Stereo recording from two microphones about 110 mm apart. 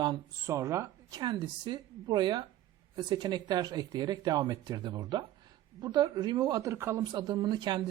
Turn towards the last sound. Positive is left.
turn(degrees=-40)  # may be behind; listen again after turning